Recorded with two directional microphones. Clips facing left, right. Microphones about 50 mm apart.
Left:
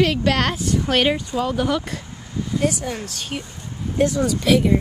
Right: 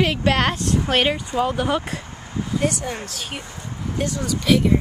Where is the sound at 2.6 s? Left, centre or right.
Centre.